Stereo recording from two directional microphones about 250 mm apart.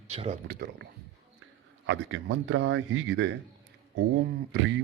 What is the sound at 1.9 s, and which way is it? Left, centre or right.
Speech, right.